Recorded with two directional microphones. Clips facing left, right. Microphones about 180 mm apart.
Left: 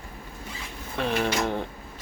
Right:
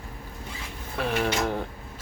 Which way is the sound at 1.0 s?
5° right (ahead or behind).